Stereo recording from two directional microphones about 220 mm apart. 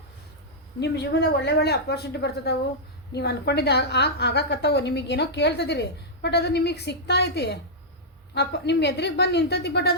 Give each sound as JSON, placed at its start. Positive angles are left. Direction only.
{"t": 0.8, "sound": "a woman's voice", "side_deg": 50}